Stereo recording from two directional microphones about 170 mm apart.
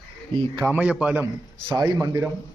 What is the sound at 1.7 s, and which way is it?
Speech, 20° right (ahead or behind).